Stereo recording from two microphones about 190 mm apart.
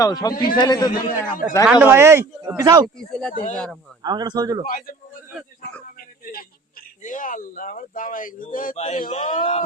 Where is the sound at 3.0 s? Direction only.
5° left (ahead or behind).